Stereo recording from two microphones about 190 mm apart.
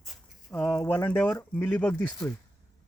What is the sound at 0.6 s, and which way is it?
Speech, 15° left (ahead or behind).